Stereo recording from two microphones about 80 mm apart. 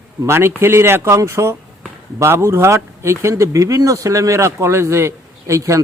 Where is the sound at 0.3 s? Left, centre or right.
Right.